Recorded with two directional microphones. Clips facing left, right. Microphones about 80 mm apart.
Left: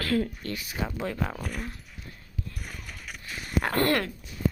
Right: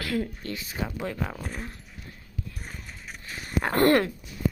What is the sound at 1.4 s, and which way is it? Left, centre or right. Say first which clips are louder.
Speech: left 1 dB; right.